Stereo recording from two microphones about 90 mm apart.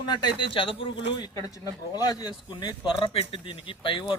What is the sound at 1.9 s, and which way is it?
Speech, 45° left (ahead or behind).